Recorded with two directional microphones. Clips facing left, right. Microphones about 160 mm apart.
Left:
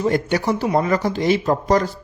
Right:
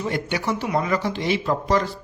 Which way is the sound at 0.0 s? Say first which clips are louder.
Left 6 dB; 45° left (ahead or behind).